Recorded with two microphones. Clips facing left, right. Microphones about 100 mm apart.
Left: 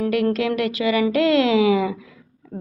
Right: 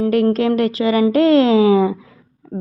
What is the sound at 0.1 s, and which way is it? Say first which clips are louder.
A woman's voice: right 5 dB; 35° right (ahead or behind).